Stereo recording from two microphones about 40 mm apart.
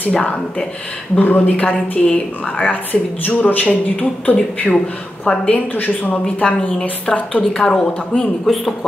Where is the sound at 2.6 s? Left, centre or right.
Left.